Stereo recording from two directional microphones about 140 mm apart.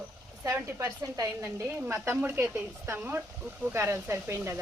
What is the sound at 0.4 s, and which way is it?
A woman's voice, 20° right (ahead or behind).